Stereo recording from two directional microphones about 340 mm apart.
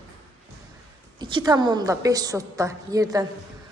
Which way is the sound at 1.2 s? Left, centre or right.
Centre.